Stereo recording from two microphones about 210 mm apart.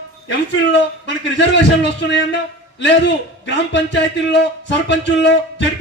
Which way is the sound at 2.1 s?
55° left (ahead or behind).